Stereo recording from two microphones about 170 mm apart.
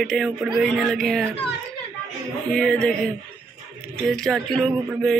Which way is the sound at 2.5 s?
5° left (ahead or behind).